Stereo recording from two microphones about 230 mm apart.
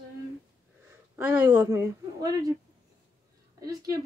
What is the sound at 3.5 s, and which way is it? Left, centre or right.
Speech, centre.